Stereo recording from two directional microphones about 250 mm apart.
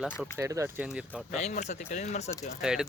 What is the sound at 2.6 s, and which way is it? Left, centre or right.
Speech, centre.